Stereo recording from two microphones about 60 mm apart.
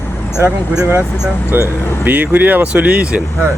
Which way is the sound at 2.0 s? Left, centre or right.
Right.